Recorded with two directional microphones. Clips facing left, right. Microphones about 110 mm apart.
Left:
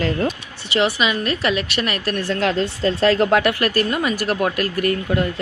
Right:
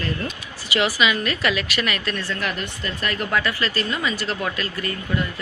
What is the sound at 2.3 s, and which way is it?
Speech, 90° left.